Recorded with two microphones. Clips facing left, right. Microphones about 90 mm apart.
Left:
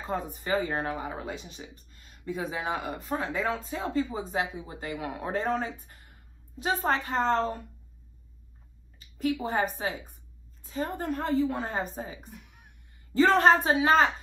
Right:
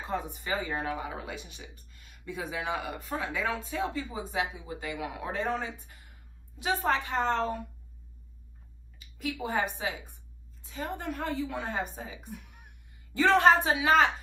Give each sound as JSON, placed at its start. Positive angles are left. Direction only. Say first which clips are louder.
{"t": 0.1, "sound": "speech", "louder": "left 4 dB", "side_deg": 45}
{"t": 9.4, "sound": "a woman's voice", "louder": "left 2 dB", "side_deg": 40}
{"t": 12.3, "sound": "music", "louder": "right 4 dB", "side_deg": 0}
{"t": 13.1, "sound": "speech", "louder": "left 1 dB", "side_deg": 45}